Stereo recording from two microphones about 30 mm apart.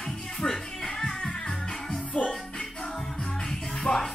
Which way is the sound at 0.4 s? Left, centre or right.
Centre.